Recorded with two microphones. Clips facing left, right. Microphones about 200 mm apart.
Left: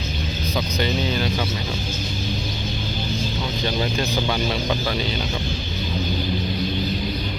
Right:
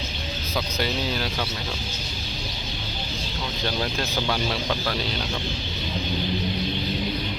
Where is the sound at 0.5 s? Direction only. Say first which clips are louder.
Left 3 dB; centre (ahead or behind).